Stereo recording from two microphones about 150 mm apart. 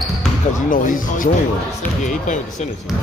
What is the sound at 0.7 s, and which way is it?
Speech, 60° left (ahead or behind).